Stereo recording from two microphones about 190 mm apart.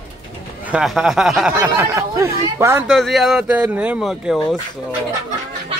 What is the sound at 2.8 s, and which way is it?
Speech, centre (ahead or behind).